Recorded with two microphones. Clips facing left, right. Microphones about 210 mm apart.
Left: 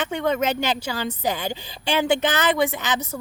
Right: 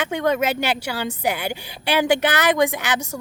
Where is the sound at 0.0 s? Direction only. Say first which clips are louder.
Right 2 dB; 10° right (ahead or behind).